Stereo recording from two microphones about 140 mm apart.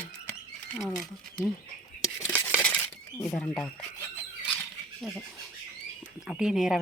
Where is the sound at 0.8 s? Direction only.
5° left (ahead or behind).